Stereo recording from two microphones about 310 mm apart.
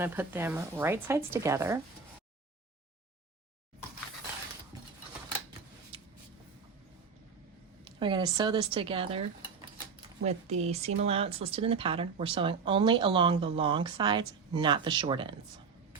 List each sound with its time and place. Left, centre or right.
0.0 s speech: centre
5.9 s a sound: centre
7.9 s speech: centre